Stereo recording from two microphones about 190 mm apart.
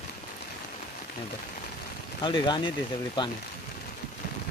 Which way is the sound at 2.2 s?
25° left (ahead or behind).